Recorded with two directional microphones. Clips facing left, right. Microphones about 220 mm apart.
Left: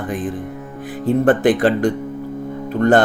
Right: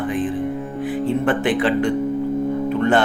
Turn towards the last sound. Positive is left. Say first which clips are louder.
# left 3 dB
turn(degrees=40)  # may be behind; listen again after turning